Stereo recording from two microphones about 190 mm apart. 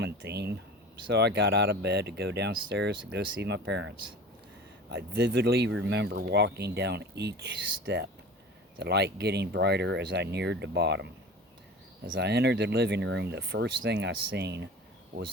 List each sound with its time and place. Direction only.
0.0 s speech: 60° right (ahead or behind)
12.1 s speech: 60° right (ahead or behind)